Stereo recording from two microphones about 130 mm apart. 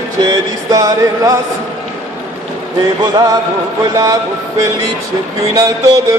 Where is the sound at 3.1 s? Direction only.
30° right (ahead or behind).